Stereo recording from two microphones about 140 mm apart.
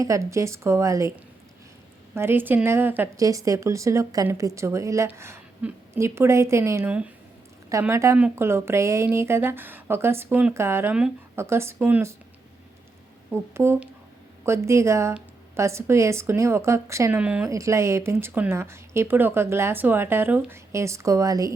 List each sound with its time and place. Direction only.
0.0 s speech: 20° right (ahead or behind)
2.1 s speech: 15° right (ahead or behind)
13.3 s speech: 20° right (ahead or behind)
17.2 s speech: 10° right (ahead or behind)
17.5 s speech: 20° right (ahead or behind)